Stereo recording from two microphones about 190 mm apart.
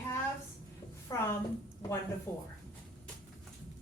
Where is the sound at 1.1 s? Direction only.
20° left (ahead or behind).